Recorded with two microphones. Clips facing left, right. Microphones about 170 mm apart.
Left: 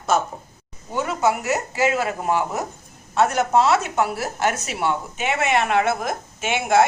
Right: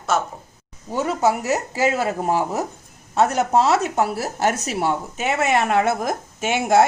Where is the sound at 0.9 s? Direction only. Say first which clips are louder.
Right 1 dB; 35° right (ahead or behind).